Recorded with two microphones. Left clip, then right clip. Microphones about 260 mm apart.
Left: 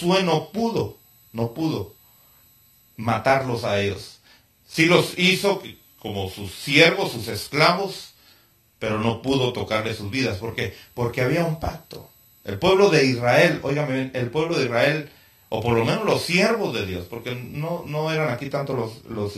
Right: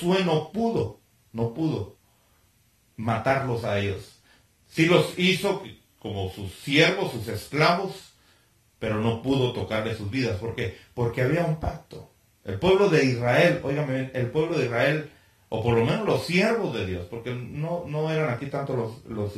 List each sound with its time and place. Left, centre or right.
0.0 s speech: left
3.0 s speech: centre
8.7 s speech: centre